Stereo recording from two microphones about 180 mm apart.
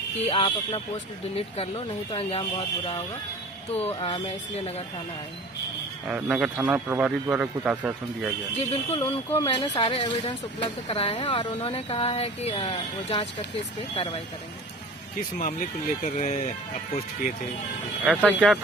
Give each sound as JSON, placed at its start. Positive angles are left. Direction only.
{"t": 0.2, "sound": "speech", "side_deg": 30}
{"t": 6.1, "sound": "a man's voice", "side_deg": -10}
{"t": 8.7, "sound": "speech", "side_deg": 30}
{"t": 15.4, "sound": "speech", "side_deg": 45}
{"t": 18.0, "sound": "speech", "side_deg": -5}